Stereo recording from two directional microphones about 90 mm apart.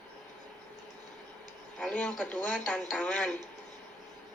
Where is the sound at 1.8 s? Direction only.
10° left (ahead or behind).